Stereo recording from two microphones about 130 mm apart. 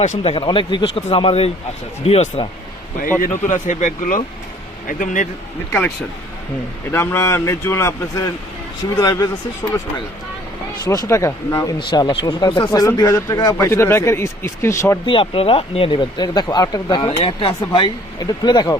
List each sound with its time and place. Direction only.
0.2 s speech: 45° left (ahead or behind)
3.2 s a man's voice: 80° left
6.9 s speech: 20° left (ahead or behind)
11.1 s speech: 25° left (ahead or behind)
11.8 s speech: 35° left (ahead or behind); by 14.9 s 20° left (ahead or behind)
15.0 s speech: 40° left (ahead or behind)